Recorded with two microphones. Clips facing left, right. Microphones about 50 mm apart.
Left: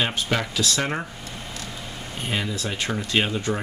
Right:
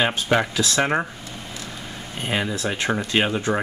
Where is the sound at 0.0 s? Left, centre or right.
Right.